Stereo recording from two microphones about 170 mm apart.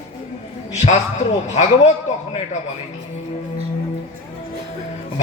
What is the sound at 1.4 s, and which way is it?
Speech, 40° left (ahead or behind).